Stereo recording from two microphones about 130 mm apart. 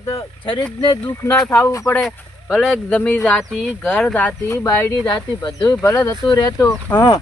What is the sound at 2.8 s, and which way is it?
Speech, 10° left (ahead or behind).